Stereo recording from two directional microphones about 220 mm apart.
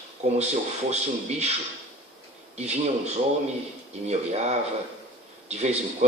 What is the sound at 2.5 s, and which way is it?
Speech, 30° right (ahead or behind).